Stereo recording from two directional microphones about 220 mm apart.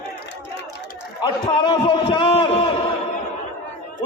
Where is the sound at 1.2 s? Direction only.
20° left (ahead or behind).